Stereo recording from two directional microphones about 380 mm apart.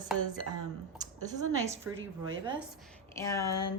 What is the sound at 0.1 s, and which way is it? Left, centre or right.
Speech, centre.